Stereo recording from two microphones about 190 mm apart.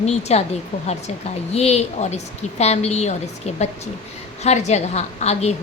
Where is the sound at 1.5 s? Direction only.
35° left (ahead or behind).